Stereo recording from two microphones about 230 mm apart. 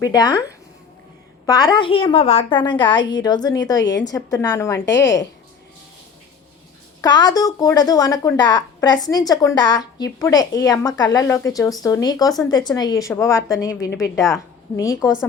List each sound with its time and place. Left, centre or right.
0.0 s speech: centre
1.5 s a woman's voice: centre
7.0 s speech: centre
15.0 s speech: centre